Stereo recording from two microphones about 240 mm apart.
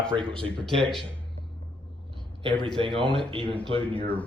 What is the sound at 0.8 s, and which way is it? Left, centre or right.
Mantra, centre.